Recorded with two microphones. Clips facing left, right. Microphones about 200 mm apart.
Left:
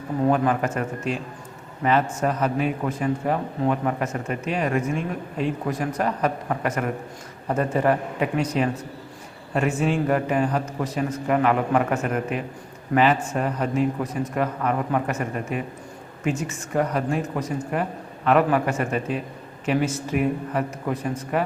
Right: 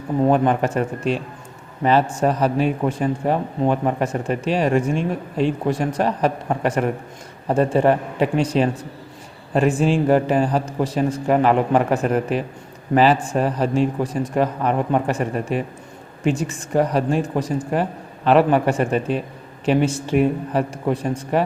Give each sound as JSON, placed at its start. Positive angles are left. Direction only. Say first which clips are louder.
{"t": 0.3, "sound": "a man's voice", "louder": "right 3 dB", "side_deg": -30}